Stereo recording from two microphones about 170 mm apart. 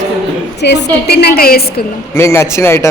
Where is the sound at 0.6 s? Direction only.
90° left; by 1.8 s 65° left (ahead or behind).